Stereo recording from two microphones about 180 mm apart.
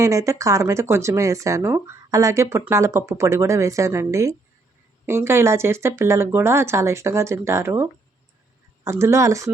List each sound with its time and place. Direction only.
0.0 s speech: 15° right (ahead or behind)